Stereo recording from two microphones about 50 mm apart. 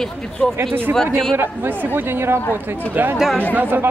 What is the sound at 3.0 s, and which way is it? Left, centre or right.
Speech, right.